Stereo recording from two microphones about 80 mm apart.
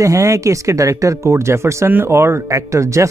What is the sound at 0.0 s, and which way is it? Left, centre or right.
Speech, right.